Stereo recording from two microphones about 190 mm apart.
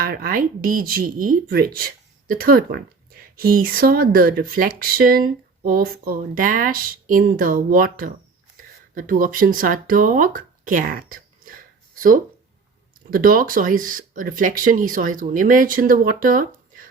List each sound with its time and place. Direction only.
0.0 s speech: 50° right (ahead or behind)